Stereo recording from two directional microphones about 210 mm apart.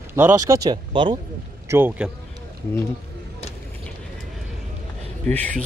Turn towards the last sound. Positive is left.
turn(degrees=5)  # may be behind; listen again after turning